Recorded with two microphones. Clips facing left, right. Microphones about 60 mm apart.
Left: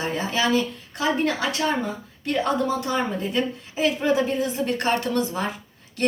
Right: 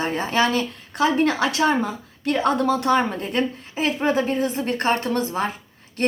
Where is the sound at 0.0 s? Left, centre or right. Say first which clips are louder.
Right 3 dB; right.